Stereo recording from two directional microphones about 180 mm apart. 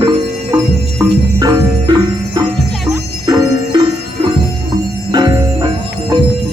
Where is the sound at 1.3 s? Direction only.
20° right (ahead or behind).